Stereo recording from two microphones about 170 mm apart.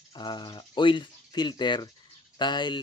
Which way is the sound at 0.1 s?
25° left (ahead or behind).